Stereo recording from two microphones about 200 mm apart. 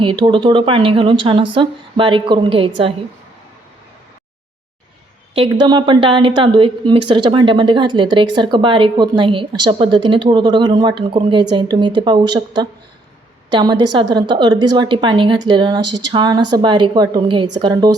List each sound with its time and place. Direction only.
0.0 s a woman's voice: 25° right (ahead or behind)
5.3 s a woman's voice: 25° right (ahead or behind)